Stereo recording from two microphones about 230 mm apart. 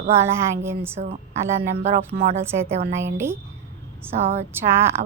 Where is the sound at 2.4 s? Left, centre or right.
Centre.